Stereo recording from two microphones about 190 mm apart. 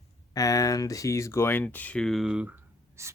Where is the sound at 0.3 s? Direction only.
20° left (ahead or behind).